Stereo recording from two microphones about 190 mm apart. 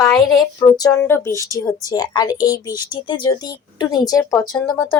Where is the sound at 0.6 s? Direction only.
10° left (ahead or behind).